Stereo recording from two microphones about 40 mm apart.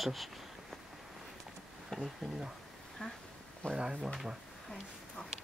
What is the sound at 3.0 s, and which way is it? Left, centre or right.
Speech, left.